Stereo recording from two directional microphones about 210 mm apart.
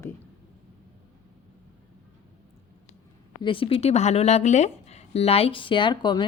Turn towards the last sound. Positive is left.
turn(degrees=20)  # may be behind; listen again after turning